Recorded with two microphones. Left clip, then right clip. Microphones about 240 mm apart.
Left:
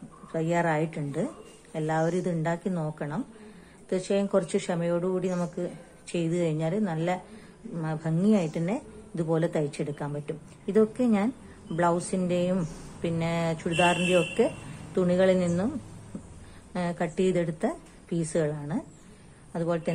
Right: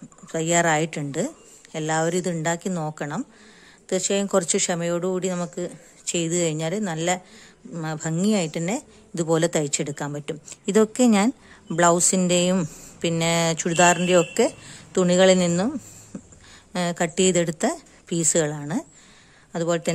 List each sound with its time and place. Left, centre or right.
0.3 s speech: right
15.0 s speech: right
16.1 s a sound: right
16.7 s speech: right